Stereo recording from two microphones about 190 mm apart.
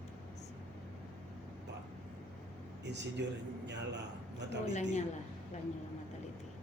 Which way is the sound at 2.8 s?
65° right (ahead or behind).